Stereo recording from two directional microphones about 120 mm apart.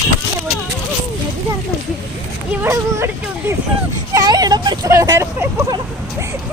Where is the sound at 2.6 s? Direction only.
25° right (ahead or behind).